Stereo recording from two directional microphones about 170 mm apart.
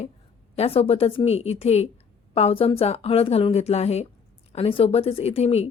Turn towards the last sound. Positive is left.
turn(degrees=35)  # may be behind; listen again after turning